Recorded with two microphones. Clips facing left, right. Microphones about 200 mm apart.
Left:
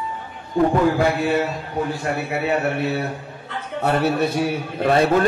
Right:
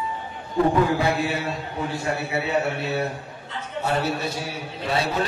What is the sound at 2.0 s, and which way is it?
A man's voice, 60° left (ahead or behind).